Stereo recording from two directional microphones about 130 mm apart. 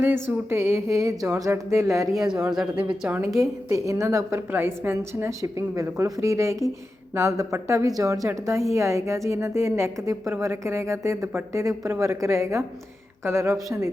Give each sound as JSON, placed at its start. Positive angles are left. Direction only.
{"t": 0.0, "sound": "a woman's voice", "side_deg": -15}
{"t": 2.1, "sound": "speech", "side_deg": -5}
{"t": 3.7, "sound": "a woman's voice", "side_deg": -25}